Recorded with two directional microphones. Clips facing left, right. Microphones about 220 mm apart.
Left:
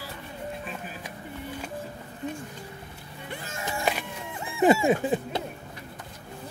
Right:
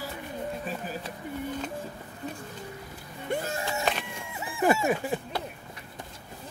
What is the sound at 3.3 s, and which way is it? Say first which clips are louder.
Music: right 10 dB; 45° right (ahead or behind).